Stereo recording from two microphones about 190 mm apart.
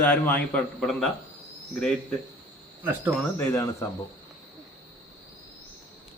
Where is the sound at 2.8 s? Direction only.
10° right (ahead or behind).